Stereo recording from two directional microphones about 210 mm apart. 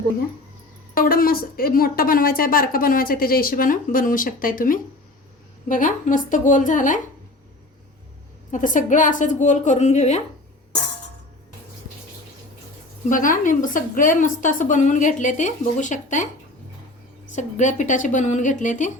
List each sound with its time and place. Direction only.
0.9 s a woman's voice: 45° left (ahead or behind)
8.4 s a woman's voice: 40° left (ahead or behind)
13.1 s a woman's voice: 40° left (ahead or behind)
17.3 s a woman's voice: 35° left (ahead or behind)